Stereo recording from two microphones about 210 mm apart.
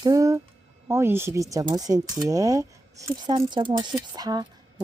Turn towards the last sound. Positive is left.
turn(degrees=-20)  # may be behind; listen again after turning